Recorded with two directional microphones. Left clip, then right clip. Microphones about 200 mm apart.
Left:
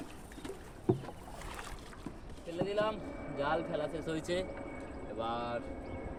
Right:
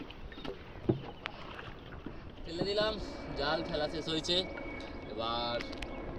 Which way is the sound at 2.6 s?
25° left (ahead or behind).